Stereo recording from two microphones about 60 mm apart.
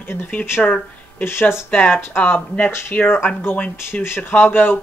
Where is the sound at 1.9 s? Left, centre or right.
Left.